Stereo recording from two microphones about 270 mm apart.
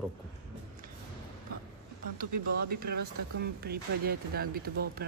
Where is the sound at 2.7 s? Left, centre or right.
Right.